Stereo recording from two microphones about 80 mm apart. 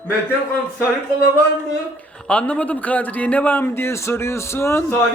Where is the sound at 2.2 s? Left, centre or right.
Centre; by 4.9 s left.